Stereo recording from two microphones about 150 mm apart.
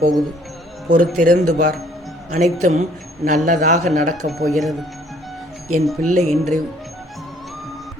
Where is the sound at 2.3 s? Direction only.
50° right (ahead or behind).